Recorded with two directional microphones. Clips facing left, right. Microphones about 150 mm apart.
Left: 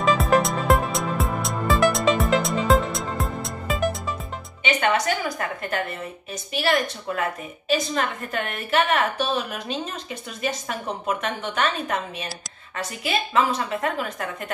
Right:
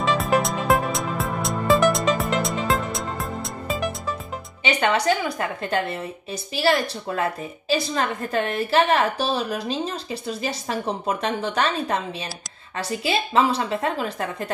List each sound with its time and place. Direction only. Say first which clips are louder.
0.0 s music: left 2 dB; centre (ahead or behind)
4.6 s a woman's voice: right 2 dB; 30° right (ahead or behind)